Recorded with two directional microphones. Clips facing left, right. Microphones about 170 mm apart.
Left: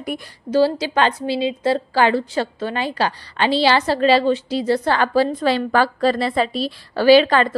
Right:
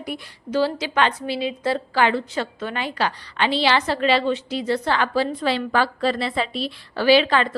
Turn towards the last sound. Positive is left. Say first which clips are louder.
# left 4 dB
turn(degrees=45)  # may be behind; listen again after turning